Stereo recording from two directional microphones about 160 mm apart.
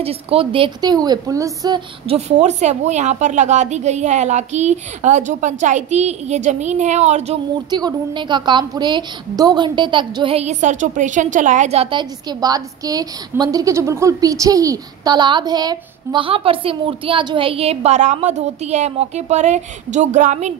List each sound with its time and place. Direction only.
0.0 s a woman's voice: 35° right (ahead or behind); by 1.8 s 20° right (ahead or behind)
2.0 s a woman's voice: 45° right (ahead or behind)
7.7 s a woman's voice: 30° right (ahead or behind); by 20.5 s 45° right (ahead or behind)